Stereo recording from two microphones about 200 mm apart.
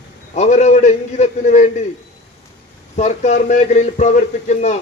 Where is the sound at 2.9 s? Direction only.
35° left (ahead or behind).